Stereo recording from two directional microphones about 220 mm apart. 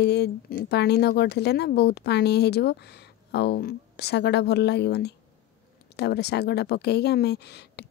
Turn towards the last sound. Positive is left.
turn(degrees=50)  # may be behind; listen again after turning